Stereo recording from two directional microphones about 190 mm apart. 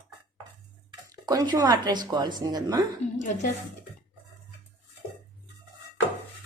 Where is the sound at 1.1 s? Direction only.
20° right (ahead or behind).